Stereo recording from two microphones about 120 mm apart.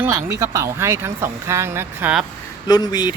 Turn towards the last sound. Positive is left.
turn(degrees=35)  # may be behind; listen again after turning